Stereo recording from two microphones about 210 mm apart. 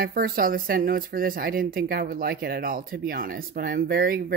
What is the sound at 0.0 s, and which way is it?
Speech, 45° right (ahead or behind).